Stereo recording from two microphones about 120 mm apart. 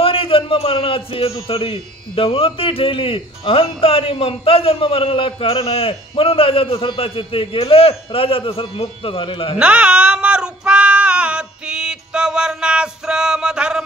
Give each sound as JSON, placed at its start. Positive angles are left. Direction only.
{"t": 0.0, "sound": "a sound", "side_deg": 50}
{"t": 1.5, "sound": "speech", "side_deg": 50}
{"t": 9.6, "sound": "female singing", "side_deg": -10}